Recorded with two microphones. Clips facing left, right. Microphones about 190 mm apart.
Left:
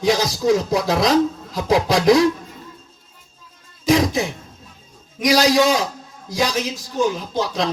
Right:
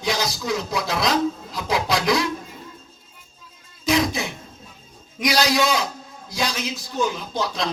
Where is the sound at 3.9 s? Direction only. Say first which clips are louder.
Left 4 dB; 40° left (ahead or behind).